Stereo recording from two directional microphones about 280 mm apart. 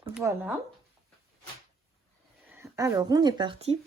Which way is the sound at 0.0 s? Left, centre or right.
Centre.